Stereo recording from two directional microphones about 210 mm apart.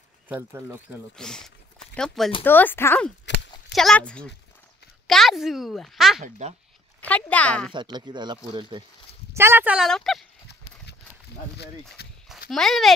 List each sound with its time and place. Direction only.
0.3 s speech: 10° right (ahead or behind)
1.1 s speech: 5° left (ahead or behind)
3.3 s a sound: 55° left (ahead or behind)
3.7 s speech: 5° left (ahead or behind)
6.2 s speech: 35° right (ahead or behind)
7.0 s speech: 5° left (ahead or behind)
7.7 s speech: 20° right (ahead or behind)
9.3 s speech: 10° right (ahead or behind)
12.3 s a child's voice: centre (ahead or behind)